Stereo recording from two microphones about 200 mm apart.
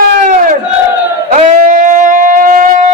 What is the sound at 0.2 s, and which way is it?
Crowd, 40° right (ahead or behind).